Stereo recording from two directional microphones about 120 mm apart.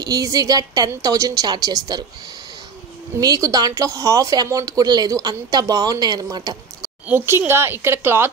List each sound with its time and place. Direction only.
0.0 s speech: 30° right (ahead or behind)
3.2 s speech: 30° right (ahead or behind)
7.1 s a woman's voice: 20° right (ahead or behind)